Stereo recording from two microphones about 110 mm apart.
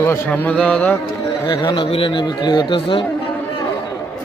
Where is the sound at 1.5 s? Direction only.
45° left (ahead or behind).